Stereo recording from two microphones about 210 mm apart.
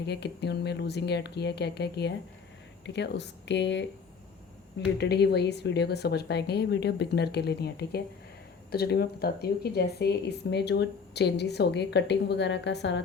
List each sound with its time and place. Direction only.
0.0 s speech: 55° left (ahead or behind)
4.9 s speech: 50° left (ahead or behind)